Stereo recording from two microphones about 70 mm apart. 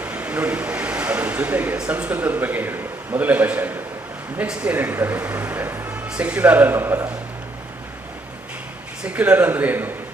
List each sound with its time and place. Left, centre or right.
0.0 s a sound: right
1.8 s a man's voice: centre
5.6 s speech: right
6.1 s a man's voice: centre; by 7.1 s right
9.0 s a man's voice: centre